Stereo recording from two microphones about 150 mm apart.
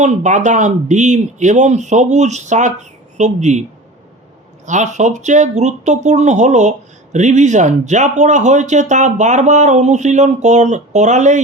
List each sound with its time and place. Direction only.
0.0 s speech: 55° right (ahead or behind)
4.6 s speech: 55° right (ahead or behind)